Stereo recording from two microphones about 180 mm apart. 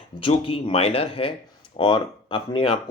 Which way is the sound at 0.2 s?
30° left (ahead or behind).